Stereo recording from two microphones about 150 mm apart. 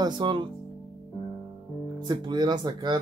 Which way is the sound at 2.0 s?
30° right (ahead or behind).